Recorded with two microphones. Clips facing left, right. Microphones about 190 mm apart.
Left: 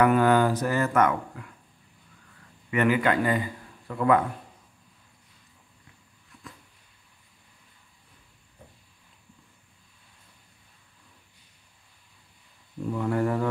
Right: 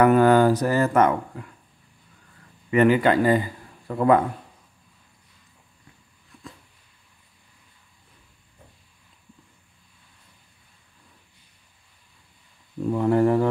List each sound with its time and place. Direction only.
0.0 s speech: 40° right (ahead or behind)
2.7 s a man's voice: 30° right (ahead or behind)
12.9 s speech: 30° right (ahead or behind)